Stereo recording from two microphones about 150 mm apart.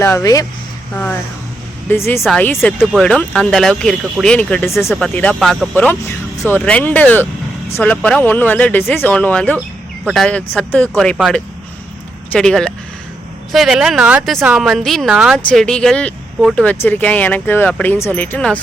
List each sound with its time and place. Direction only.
0.0 s speech: 20° left (ahead or behind)
2.7 s speech: centre (ahead or behind)
9.6 s speech: centre (ahead or behind)